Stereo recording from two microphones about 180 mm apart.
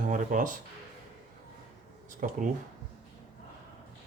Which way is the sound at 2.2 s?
45° right (ahead or behind).